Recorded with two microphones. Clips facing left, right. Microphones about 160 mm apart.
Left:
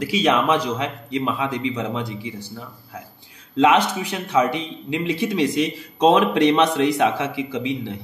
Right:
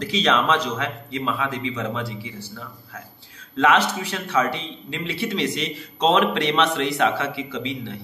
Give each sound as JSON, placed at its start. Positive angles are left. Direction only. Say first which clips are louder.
{"t": 0.0, "sound": "a man's voice", "louder": "left 2 dB", "side_deg": 10}
{"t": 3.5, "sound": "a man's voice", "louder": "left 3 dB", "side_deg": 15}